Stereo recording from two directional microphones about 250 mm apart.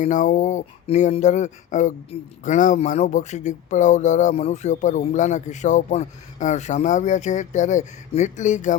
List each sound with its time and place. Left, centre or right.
0.0 s speech: left